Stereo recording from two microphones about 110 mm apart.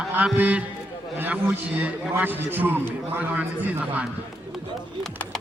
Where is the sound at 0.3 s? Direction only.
15° right (ahead or behind).